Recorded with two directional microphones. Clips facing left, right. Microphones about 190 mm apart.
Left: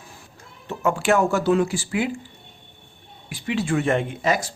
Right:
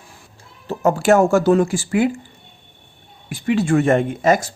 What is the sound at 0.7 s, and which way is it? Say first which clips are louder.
Speech: right 5 dB; 40° right (ahead or behind).